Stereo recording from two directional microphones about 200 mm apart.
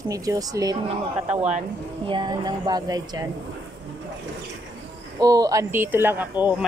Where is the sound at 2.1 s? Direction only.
20° right (ahead or behind).